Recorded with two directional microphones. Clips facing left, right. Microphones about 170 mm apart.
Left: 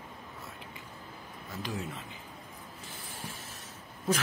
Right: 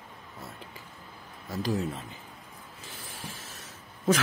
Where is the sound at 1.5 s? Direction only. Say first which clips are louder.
Right 8 dB; 40° right (ahead or behind).